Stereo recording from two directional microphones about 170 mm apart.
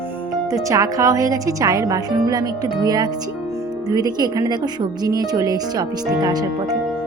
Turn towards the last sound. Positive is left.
turn(degrees=-25)  # may be behind; listen again after turning